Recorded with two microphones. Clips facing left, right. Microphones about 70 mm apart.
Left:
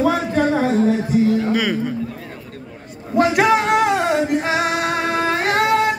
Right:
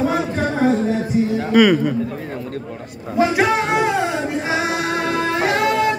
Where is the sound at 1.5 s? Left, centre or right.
Right.